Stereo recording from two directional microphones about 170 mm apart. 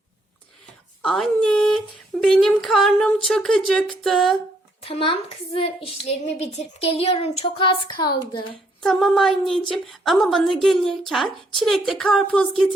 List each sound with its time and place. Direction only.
1.0 s a woman's voice: centre (ahead or behind)
4.8 s a child's voice: 30° left (ahead or behind)
8.8 s a woman's voice: centre (ahead or behind)